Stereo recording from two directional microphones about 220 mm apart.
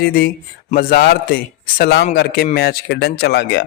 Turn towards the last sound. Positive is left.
turn(degrees=50)  # may be behind; listen again after turning